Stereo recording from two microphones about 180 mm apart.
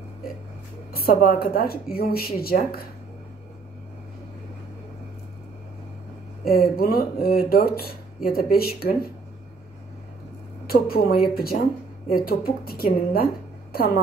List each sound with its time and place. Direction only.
0.9 s speech: 55° left (ahead or behind)
6.4 s speech: 55° left (ahead or behind)
10.7 s speech: 55° left (ahead or behind)